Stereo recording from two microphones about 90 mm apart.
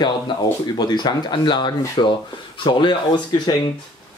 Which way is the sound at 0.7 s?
50° left (ahead or behind).